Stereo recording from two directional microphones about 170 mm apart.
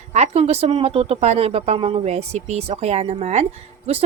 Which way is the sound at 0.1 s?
40° right (ahead or behind).